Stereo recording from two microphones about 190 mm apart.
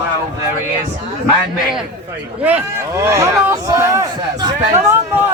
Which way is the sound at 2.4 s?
10° right (ahead or behind).